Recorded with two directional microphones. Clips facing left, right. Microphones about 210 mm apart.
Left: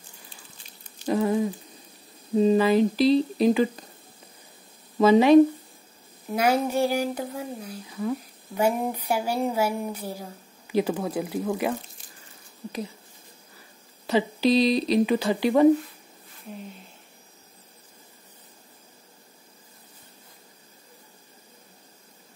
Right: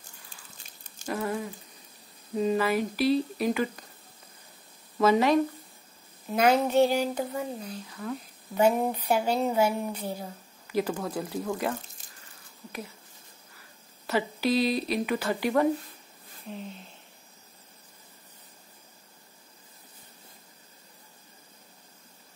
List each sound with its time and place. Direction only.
1.0 s a sound: 20° left (ahead or behind)
2.3 s speech: 25° left (ahead or behind)
4.9 s speech: 15° left (ahead or behind)
6.3 s speech: 10° left (ahead or behind)
14.0 s speech: 20° left (ahead or behind)